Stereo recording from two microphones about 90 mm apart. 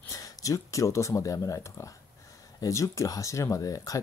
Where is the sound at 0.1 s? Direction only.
40° left (ahead or behind).